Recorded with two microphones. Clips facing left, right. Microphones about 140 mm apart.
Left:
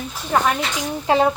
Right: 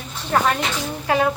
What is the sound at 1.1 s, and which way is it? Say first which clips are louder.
Speech: left 3 dB; 25° left (ahead or behind).